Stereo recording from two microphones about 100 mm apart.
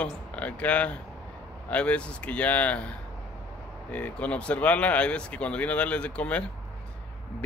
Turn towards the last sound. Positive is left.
turn(degrees=10)  # may be behind; listen again after turning